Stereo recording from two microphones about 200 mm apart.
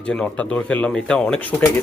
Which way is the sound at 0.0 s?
5° left (ahead or behind).